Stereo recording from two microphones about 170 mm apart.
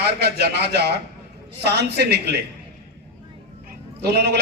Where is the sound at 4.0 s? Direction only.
75° right (ahead or behind).